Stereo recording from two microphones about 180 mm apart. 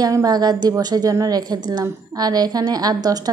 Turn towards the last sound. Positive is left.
turn(degrees=-20)  # may be behind; listen again after turning